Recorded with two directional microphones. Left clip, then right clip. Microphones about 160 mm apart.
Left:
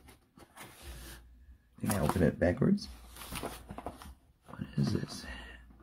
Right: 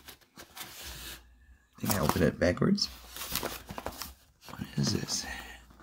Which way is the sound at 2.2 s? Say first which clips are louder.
Right 1 dB; 10° right (ahead or behind).